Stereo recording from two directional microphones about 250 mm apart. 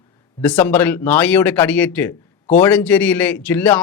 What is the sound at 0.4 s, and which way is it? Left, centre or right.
A man's voice, centre.